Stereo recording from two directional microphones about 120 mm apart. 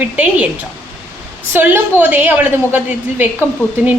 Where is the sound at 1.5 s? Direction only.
15° right (ahead or behind).